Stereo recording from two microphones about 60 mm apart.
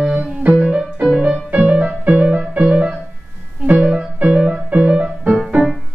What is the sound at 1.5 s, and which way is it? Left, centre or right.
Music, centre.